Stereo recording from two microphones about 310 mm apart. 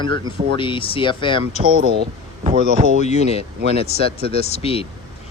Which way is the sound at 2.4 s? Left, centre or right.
Right.